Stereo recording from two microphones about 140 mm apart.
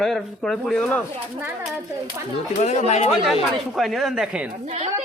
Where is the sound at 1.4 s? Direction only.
15° right (ahead or behind).